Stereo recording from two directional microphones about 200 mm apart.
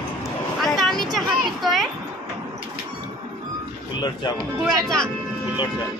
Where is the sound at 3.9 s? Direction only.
20° left (ahead or behind).